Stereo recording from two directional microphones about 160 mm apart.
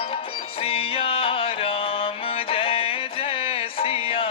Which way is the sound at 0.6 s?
35° left (ahead or behind).